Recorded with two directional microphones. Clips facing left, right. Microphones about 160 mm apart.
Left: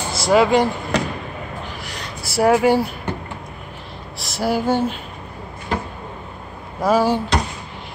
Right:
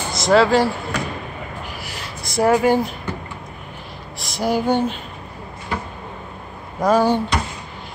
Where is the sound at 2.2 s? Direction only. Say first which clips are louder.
Left 1 dB; 10° left (ahead or behind).